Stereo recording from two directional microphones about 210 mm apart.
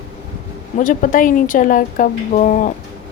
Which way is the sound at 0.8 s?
40° left (ahead or behind).